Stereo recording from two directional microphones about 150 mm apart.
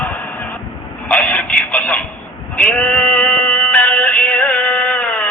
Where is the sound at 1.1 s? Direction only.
10° left (ahead or behind).